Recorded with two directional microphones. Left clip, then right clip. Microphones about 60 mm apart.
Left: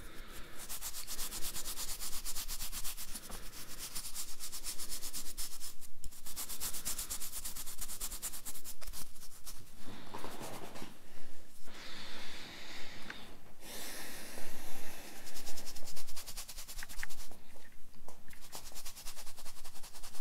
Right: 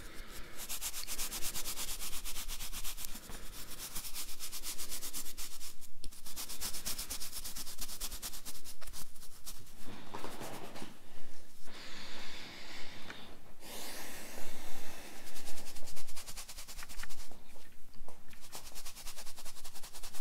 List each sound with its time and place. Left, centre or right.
0.0 s rub: centre
0.7 s rub: centre
3.1 s rub: centre
3.6 s rub: right
4.7 s rub: centre
6.2 s a sound: centre
18.5 s a sound: centre